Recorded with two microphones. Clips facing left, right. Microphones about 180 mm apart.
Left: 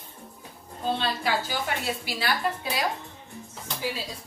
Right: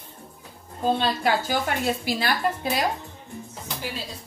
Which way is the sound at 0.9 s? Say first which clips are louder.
Right 3 dB; 45° right (ahead or behind).